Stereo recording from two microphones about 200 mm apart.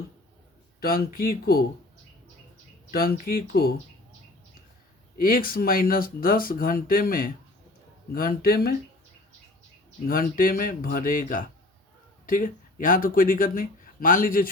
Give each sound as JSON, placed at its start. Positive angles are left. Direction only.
{"t": 0.8, "sound": "speech", "side_deg": 50}
{"t": 2.9, "sound": "speech", "side_deg": 50}
{"t": 5.1, "sound": "speech", "side_deg": 45}
{"t": 10.1, "sound": "speech", "side_deg": 45}